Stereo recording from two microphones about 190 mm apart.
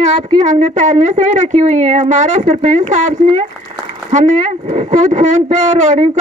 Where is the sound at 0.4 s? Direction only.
40° right (ahead or behind).